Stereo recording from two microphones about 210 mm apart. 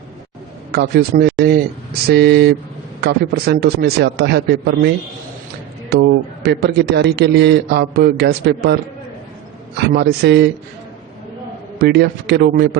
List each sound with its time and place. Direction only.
0.7 s a man's voice: 50° right (ahead or behind)
5.9 s a man's voice: 50° right (ahead or behind)
11.8 s a man's voice: 50° right (ahead or behind)